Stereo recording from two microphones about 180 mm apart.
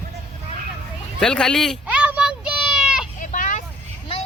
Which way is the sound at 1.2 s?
5° left (ahead or behind).